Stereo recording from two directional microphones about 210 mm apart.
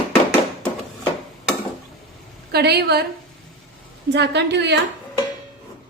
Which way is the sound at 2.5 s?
50° right (ahead or behind).